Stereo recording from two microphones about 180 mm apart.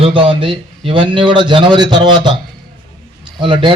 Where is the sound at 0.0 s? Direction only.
30° right (ahead or behind).